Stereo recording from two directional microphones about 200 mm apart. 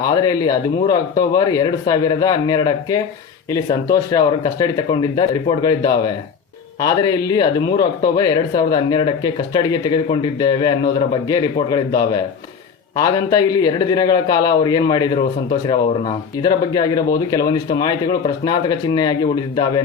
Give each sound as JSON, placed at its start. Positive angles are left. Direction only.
{"t": 0.0, "sound": "speech", "side_deg": 20}
{"t": 13.0, "sound": "speech", "side_deg": 20}